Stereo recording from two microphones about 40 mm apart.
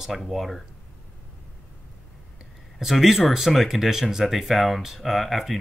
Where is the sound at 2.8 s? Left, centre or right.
Centre.